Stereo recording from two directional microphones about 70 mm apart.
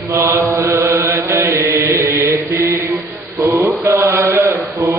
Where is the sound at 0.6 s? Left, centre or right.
Right.